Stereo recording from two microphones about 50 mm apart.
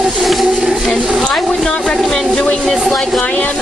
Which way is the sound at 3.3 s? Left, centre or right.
Left.